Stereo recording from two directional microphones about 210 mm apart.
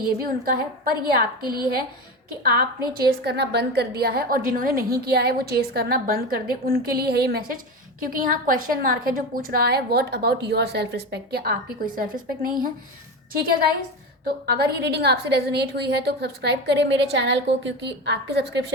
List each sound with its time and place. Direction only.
0.0 s a woman's voice: 45° right (ahead or behind)
14.3 s a woman's voice: 50° right (ahead or behind)